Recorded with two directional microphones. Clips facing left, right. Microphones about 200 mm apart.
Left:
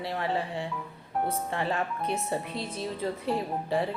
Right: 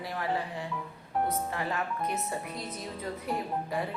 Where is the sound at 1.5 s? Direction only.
30° left (ahead or behind).